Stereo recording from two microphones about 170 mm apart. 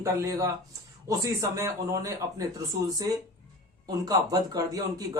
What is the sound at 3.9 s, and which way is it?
A man's voice, 20° right (ahead or behind).